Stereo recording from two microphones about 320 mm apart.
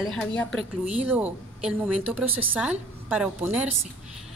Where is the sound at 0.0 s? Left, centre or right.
Centre.